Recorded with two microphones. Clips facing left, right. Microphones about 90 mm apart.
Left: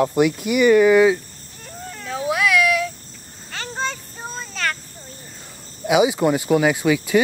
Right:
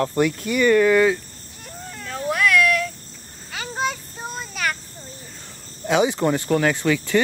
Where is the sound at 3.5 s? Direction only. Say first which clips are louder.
Right 1 dB; 10° right (ahead or behind).